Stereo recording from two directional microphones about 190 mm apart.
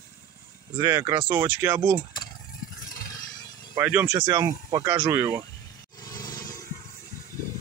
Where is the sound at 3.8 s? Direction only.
10° right (ahead or behind).